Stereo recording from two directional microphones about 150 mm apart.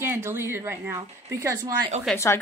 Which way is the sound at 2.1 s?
15° left (ahead or behind).